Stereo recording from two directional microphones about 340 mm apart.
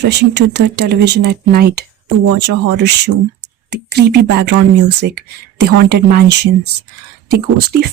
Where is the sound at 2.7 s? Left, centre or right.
Right.